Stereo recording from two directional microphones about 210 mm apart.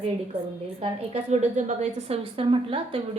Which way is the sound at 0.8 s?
30° right (ahead or behind).